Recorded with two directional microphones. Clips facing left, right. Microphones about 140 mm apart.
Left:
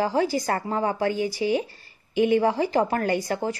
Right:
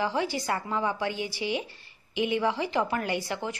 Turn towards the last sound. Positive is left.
turn(degrees=40)  # may be behind; listen again after turning